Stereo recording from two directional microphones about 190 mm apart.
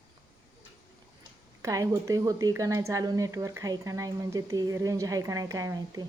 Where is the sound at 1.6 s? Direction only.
15° right (ahead or behind).